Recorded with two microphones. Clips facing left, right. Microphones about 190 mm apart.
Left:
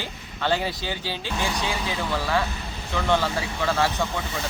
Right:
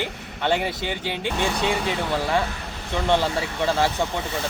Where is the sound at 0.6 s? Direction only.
65° right (ahead or behind).